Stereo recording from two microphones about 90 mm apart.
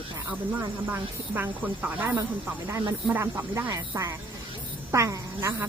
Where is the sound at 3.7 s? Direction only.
40° right (ahead or behind).